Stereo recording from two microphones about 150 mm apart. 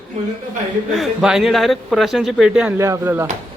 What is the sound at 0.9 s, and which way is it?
Speech, centre (ahead or behind).